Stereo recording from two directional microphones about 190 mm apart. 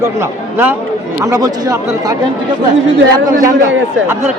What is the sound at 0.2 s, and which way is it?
Speech, 10° right (ahead or behind).